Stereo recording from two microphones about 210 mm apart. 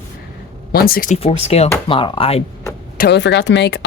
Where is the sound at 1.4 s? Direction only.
30° left (ahead or behind).